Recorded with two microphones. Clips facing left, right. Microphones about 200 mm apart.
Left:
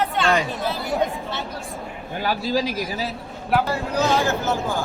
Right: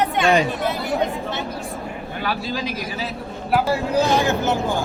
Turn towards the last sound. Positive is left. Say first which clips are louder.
# right 2 dB
turn(degrees=-15)  # may be behind; listen again after turning